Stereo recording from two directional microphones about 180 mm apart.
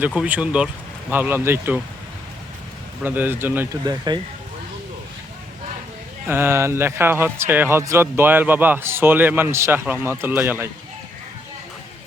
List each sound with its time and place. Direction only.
0.1 s a man's voice: 5° right (ahead or behind)
3.0 s a man's voice: 10° right (ahead or behind)
3.8 s speech: 25° right (ahead or behind)
6.2 s a man's voice: 10° right (ahead or behind)